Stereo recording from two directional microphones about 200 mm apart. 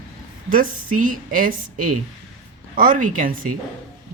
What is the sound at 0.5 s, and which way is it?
A woman's voice, 40° right (ahead or behind).